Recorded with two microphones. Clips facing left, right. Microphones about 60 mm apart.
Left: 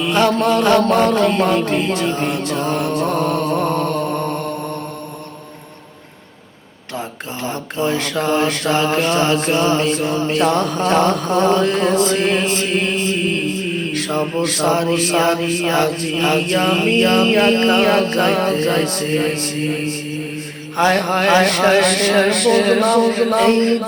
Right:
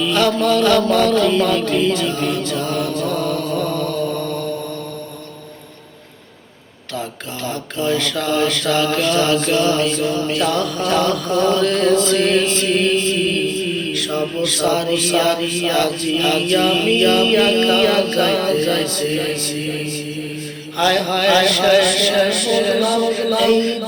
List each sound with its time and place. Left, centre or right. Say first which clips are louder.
0.0 s mantra: left 1 dB; left
0.8 s chant: left 1 dB; left
7.4 s mantra: left 1 dB; left